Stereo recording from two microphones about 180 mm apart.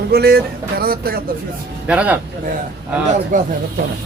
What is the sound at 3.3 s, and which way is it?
Speech, 45° right (ahead or behind).